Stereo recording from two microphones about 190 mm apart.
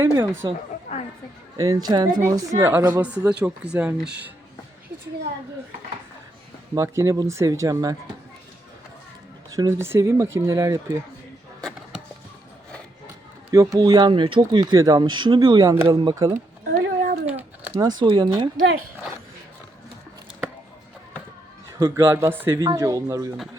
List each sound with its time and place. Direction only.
0.0 s a woman's voice: 15° right (ahead or behind)
0.9 s chatter: 35° left (ahead or behind)
1.5 s a woman's voice: 20° right (ahead or behind)
6.7 s a woman's voice: 15° right (ahead or behind)
9.5 s a woman's voice: 15° right (ahead or behind)
11.6 s a sound: centre (ahead or behind)
13.5 s a woman's voice: 15° right (ahead or behind)
17.7 s speech: 20° right (ahead or behind)
21.7 s a woman's voice: 15° right (ahead or behind)